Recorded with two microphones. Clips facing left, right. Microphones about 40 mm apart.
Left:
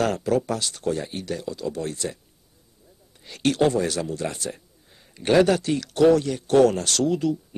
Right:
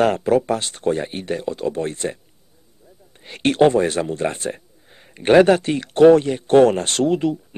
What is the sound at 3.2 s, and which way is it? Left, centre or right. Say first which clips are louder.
A man's voice: right 6 dB; right.